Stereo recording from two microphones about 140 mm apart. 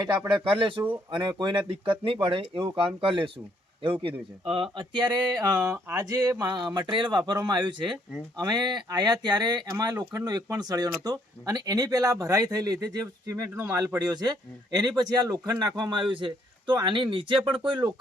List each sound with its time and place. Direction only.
0.6 s a man's voice: 40° right (ahead or behind)